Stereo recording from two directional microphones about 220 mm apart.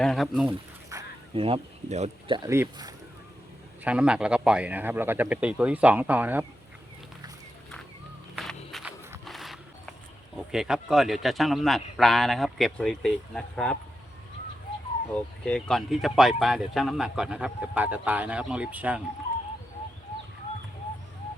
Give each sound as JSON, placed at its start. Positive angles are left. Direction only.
{"t": 0.0, "sound": "speech", "side_deg": 0}
{"t": 0.9, "sound": "speech", "side_deg": -20}
{"t": 8.4, "sound": "a sound", "side_deg": 0}
{"t": 10.3, "sound": "speech", "side_deg": 0}
{"t": 15.1, "sound": "speech", "side_deg": 5}